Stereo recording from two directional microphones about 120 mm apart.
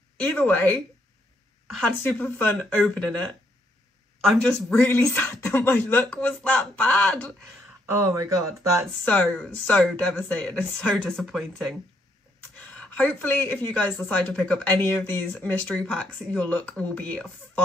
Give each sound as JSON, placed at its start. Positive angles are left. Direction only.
{"t": 0.2, "sound": "speech", "side_deg": 15}
{"t": 1.8, "sound": "speech", "side_deg": 15}
{"t": 4.6, "sound": "speech", "side_deg": 20}
{"t": 7.9, "sound": "speech", "side_deg": -25}
{"t": 9.0, "sound": "speech", "side_deg": 10}